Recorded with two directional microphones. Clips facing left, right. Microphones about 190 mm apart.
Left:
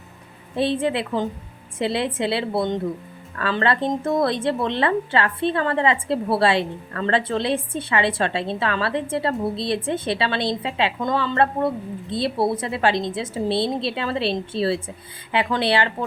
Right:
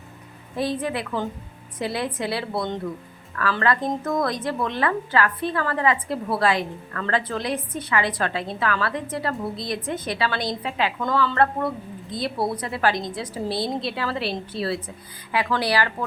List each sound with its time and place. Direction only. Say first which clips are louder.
0.5 s a woman's voice: left 4 dB; 25° left (ahead or behind)